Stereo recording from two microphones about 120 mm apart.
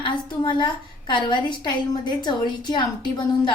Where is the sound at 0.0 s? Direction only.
40° left (ahead or behind).